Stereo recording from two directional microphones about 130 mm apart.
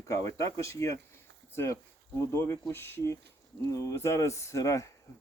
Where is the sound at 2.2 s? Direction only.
20° left (ahead or behind).